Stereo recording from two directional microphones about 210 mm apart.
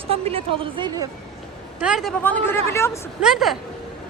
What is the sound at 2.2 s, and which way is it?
Speech, 10° left (ahead or behind).